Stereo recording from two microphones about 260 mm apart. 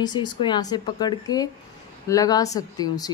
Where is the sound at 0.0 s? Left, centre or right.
Centre.